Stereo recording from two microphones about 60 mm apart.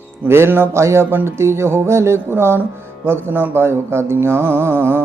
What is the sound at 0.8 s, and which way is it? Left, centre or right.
Music, right.